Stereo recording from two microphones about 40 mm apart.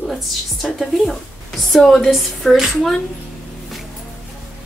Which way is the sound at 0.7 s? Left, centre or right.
Centre.